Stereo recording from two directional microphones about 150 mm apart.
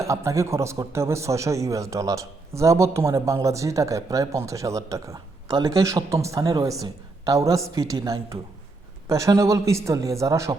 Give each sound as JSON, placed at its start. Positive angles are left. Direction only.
{"t": 0.0, "sound": "a man's voice", "side_deg": -20}